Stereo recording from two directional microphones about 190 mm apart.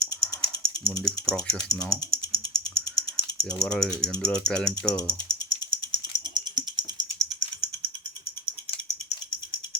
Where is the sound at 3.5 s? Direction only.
5° left (ahead or behind).